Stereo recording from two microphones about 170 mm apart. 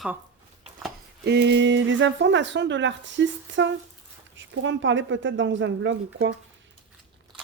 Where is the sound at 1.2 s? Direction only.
75° right (ahead or behind).